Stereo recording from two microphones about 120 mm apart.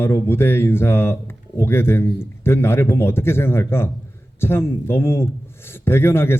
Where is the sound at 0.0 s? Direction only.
20° left (ahead or behind).